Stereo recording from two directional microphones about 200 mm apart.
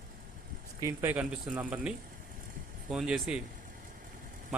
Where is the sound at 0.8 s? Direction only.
10° right (ahead or behind).